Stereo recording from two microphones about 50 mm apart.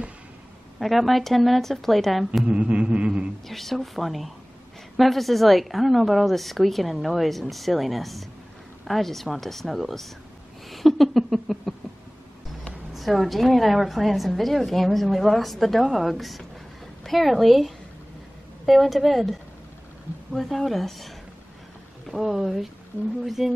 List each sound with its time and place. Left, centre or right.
0.7 s a woman's voice: centre
2.4 s music: right
3.4 s a woman's voice: centre
12.9 s a woman's voice: centre
22.1 s a woman's voice: centre